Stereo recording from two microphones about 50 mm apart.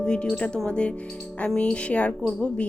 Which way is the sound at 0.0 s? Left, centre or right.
Centre.